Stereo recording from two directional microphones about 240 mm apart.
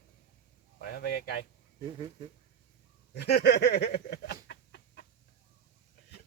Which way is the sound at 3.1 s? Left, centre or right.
Left.